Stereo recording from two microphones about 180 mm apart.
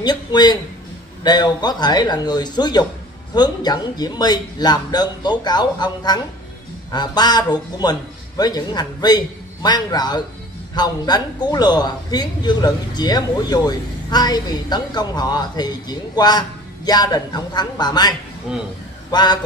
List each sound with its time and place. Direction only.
0.0 s a man's voice: 25° left (ahead or behind)